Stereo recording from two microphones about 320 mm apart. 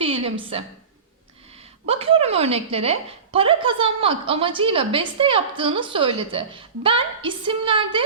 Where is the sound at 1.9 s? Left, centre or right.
Centre.